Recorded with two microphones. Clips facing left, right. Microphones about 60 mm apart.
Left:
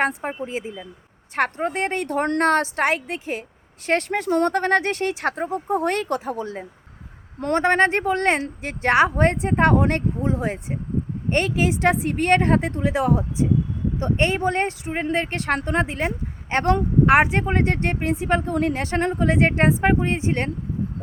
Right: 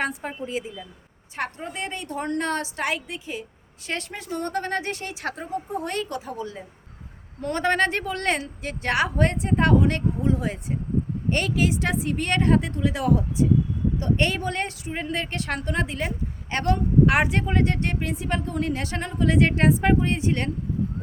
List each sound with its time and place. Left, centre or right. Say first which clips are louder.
0.0 s speech: left 5 dB; left
1.4 s a woman's voice: left 8 dB; left
10.2 s speech: left 1 dB; left